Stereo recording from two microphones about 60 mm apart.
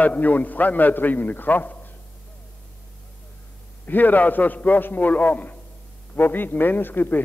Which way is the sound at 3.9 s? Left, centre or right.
Left.